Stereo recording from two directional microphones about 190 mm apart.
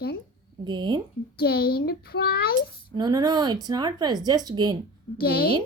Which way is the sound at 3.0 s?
20° right (ahead or behind).